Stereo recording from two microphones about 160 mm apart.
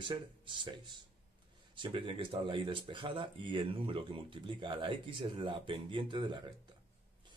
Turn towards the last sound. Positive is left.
turn(degrees=-30)  # may be behind; listen again after turning